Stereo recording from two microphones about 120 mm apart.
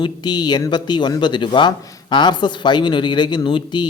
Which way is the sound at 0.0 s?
35° left (ahead or behind).